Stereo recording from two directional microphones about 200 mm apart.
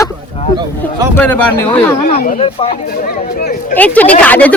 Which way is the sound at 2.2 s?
45° left (ahead or behind).